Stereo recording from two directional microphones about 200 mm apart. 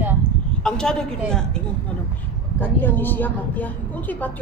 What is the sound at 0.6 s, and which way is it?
A woman's voice, 5° left (ahead or behind).